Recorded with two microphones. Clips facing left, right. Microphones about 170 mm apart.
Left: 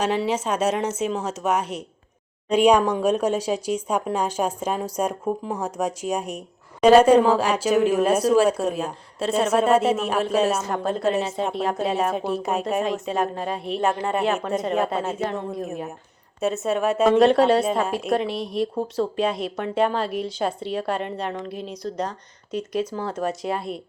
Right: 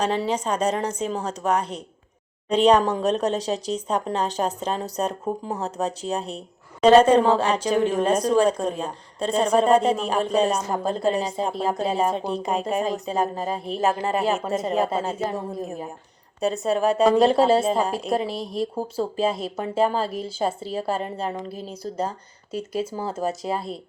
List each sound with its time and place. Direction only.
0.0 s a woman's voice: 5° left (ahead or behind)
17.0 s a woman's voice: centre (ahead or behind)
17.5 s a woman's voice: 25° right (ahead or behind)
17.7 s a woman's voice: centre (ahead or behind)
22.7 s a woman's voice: 30° right (ahead or behind)
23.3 s a woman's voice: centre (ahead or behind)